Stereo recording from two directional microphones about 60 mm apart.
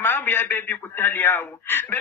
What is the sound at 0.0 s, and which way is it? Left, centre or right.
A man's voice, left.